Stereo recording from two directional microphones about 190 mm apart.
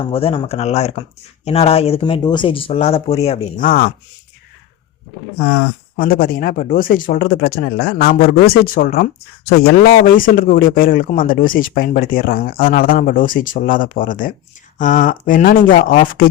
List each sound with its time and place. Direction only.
0.0 s speech: 30° left (ahead or behind)
3.6 s speech: 50° left (ahead or behind)
6.0 s speech: 50° left (ahead or behind)